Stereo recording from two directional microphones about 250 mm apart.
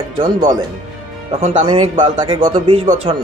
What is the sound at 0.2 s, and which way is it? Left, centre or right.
Speech, right.